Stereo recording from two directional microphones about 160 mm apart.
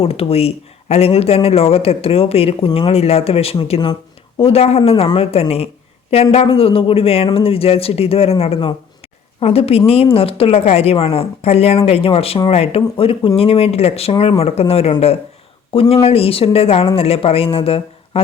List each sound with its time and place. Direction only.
0.0 s speech: 35° left (ahead or behind)